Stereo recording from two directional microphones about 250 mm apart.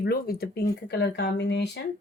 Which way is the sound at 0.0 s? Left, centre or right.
Left.